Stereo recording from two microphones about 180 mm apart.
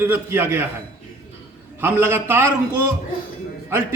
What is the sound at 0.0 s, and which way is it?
Speech, 10° right (ahead or behind).